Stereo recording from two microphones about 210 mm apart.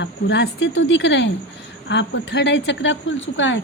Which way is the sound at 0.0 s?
55° left (ahead or behind).